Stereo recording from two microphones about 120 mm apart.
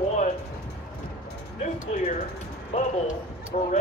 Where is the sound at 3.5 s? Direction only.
90° left.